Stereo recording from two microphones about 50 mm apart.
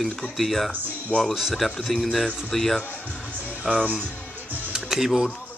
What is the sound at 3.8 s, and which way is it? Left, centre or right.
Speech, right.